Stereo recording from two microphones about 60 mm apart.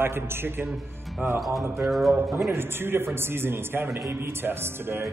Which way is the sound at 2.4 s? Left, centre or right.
Right.